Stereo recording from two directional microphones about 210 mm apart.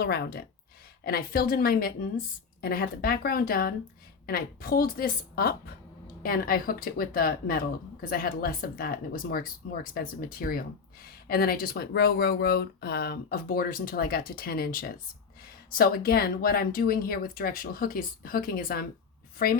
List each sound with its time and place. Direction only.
0.0 s speech: 45° left (ahead or behind)